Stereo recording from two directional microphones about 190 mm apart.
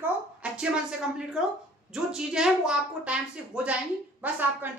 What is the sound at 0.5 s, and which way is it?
A woman's voice, 5° right (ahead or behind).